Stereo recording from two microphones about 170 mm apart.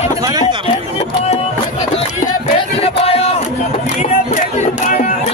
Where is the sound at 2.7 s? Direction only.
35° left (ahead or behind).